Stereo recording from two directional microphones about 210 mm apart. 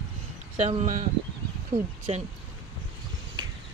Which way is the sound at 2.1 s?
30° right (ahead or behind).